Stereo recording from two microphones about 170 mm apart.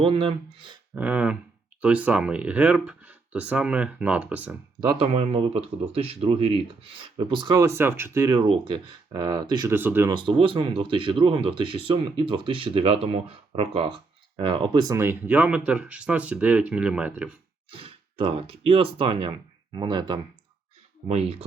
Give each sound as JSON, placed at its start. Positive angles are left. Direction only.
{"t": 0.0, "sound": "speech", "side_deg": -30}
{"t": 0.9, "sound": "speech", "side_deg": -10}
{"t": 4.8, "sound": "speech", "side_deg": -30}
{"t": 9.7, "sound": "speech", "side_deg": -10}
{"t": 10.2, "sound": "speech", "side_deg": -30}
{"t": 17.7, "sound": "speech", "side_deg": -35}